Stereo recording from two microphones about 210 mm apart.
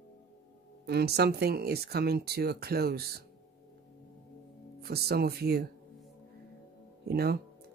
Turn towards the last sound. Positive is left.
turn(degrees=-50)  # may be behind; listen again after turning